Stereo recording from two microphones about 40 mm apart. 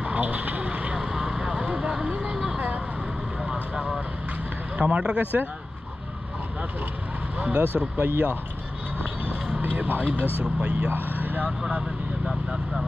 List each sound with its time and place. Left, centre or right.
0.0 s vehicle: right
0.9 s vehicle: centre
1.7 s a sound: right
2.3 s vehicle: centre
4.7 s speech: right
5.2 s speech: right
7.3 s vehicle: right
8.0 s speech: right
9.6 s speech: right
10.4 s speech: right
10.9 s speech: right